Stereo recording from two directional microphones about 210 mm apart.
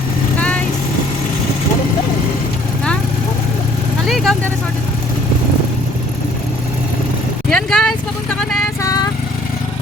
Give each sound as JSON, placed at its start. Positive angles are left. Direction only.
{"t": 0.3, "sound": "vehicle", "side_deg": 5}
{"t": 4.1, "sound": "vehicle", "side_deg": 0}
{"t": 7.5, "sound": "vehicle", "side_deg": 5}